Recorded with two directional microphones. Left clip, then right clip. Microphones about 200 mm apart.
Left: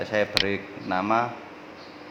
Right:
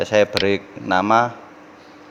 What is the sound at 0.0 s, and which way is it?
Speech, 40° right (ahead or behind).